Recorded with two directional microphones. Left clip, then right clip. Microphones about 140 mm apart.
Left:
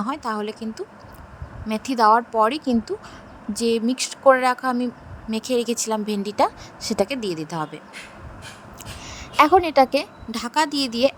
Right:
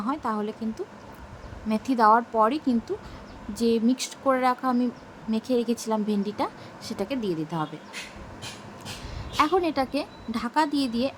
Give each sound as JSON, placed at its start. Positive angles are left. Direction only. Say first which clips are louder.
{"t": 0.0, "sound": "speech", "louder": "left 2 dB", "side_deg": 50}
{"t": 9.0, "sound": "a woman's voice", "louder": "left 8 dB", "side_deg": 50}